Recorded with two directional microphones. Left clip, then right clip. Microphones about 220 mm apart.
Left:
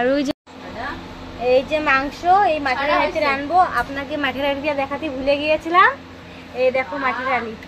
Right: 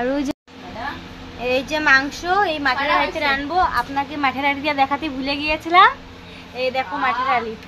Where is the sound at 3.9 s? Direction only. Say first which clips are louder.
Right 2 dB; 25° right (ahead or behind).